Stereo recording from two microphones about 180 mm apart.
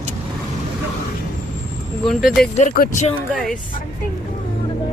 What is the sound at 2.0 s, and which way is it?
Speech, centre (ahead or behind).